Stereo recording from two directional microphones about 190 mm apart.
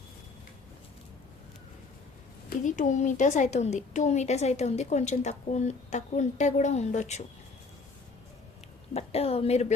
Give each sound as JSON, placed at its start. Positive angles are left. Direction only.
{"t": 2.6, "sound": "a woman's voice", "side_deg": 40}
{"t": 8.9, "sound": "a woman's voice", "side_deg": 30}